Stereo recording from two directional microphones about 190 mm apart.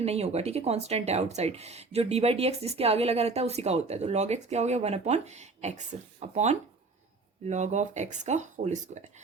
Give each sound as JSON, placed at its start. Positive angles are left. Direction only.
{"t": 0.0, "sound": "speech", "side_deg": -35}